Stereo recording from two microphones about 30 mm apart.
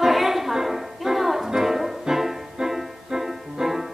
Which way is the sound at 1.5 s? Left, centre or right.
Centre.